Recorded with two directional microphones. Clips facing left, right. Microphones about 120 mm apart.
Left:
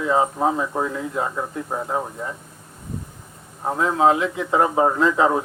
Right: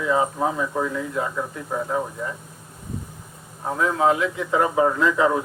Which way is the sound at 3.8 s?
25° left (ahead or behind).